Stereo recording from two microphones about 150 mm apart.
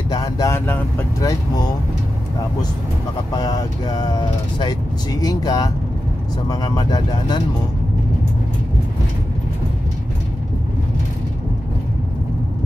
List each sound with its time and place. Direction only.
0.1 s speech: 25° left (ahead or behind)
3.3 s speech: 25° left (ahead or behind)